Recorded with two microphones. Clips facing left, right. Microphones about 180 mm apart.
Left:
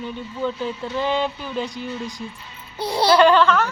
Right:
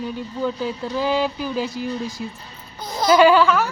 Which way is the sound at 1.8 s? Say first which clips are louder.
Right 3 dB; 35° right (ahead or behind).